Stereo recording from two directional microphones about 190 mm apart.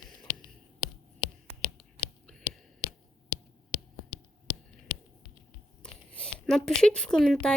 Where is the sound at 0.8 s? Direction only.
25° left (ahead or behind).